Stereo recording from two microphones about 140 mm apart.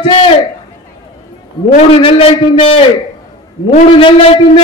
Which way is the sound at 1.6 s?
35° left (ahead or behind).